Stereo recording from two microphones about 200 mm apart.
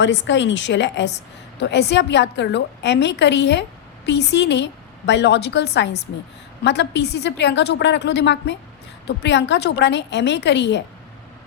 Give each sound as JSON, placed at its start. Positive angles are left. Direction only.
{"t": 0.0, "sound": "a woman's voice", "side_deg": 65}